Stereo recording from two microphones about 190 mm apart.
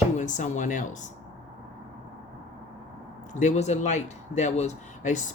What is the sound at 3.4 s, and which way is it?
Speech, 40° left (ahead or behind).